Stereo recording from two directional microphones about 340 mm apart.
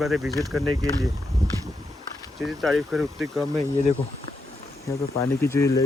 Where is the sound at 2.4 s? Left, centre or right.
Centre.